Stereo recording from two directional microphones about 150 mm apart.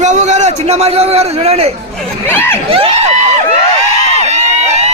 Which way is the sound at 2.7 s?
40° right (ahead or behind).